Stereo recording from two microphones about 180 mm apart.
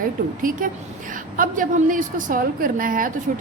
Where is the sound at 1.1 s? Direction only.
50° right (ahead or behind).